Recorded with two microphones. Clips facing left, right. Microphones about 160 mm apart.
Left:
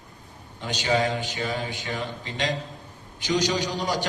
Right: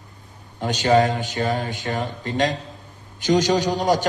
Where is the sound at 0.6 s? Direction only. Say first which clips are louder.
Right 7 dB; 50° right (ahead or behind).